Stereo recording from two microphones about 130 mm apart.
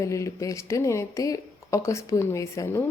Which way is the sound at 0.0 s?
25° left (ahead or behind).